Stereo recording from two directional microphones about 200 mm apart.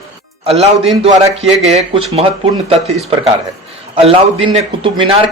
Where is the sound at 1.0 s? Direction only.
30° right (ahead or behind).